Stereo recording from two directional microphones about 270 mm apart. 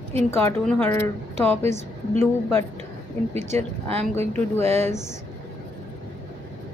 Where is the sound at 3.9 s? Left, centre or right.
Right.